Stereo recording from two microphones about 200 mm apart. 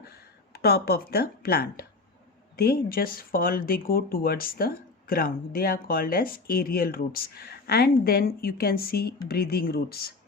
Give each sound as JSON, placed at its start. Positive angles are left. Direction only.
{"t": 0.5, "sound": "speech", "side_deg": 50}